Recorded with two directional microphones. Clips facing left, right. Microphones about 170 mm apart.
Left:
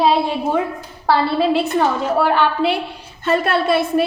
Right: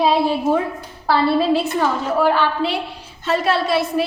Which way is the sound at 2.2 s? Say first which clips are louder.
Left 1 dB; 60° left (ahead or behind).